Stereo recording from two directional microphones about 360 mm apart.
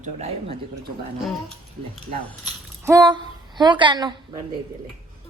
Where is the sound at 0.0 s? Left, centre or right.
Centre.